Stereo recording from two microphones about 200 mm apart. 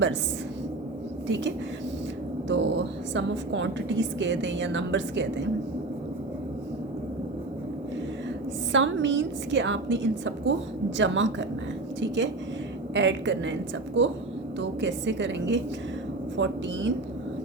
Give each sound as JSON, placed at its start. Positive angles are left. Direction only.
{"t": 2.5, "sound": "a woman's voice", "side_deg": -65}
{"t": 8.7, "sound": "a woman's voice", "side_deg": -65}